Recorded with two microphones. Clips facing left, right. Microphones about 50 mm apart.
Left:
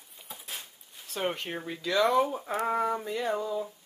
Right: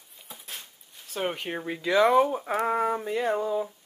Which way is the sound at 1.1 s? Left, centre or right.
Centre.